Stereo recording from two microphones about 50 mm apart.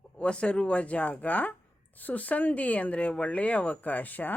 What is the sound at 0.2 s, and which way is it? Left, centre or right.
Speech, left.